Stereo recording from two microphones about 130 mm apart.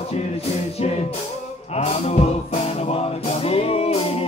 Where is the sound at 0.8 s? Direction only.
55° left (ahead or behind).